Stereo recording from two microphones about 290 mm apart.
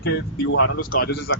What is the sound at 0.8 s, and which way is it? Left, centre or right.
Speech, left.